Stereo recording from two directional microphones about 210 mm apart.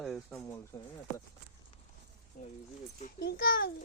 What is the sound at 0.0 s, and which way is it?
Bird, centre (ahead or behind).